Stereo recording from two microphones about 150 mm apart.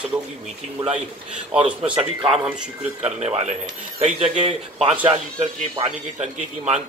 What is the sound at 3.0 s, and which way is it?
A man's voice, 45° right (ahead or behind).